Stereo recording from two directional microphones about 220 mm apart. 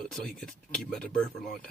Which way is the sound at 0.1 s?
Centre (ahead or behind).